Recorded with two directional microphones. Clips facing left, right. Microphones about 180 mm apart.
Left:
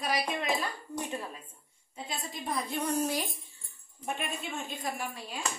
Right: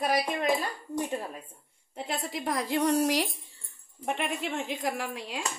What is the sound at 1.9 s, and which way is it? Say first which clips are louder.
A woman's voice: right 6 dB; 70° right (ahead or behind).